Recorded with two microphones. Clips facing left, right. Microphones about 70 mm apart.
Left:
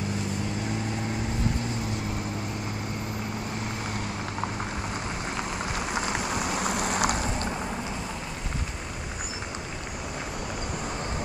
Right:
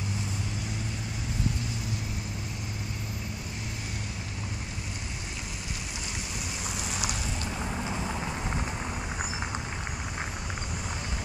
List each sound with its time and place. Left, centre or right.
5.9 s rain: left